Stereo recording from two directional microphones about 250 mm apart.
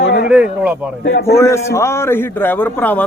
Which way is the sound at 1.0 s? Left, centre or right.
Left.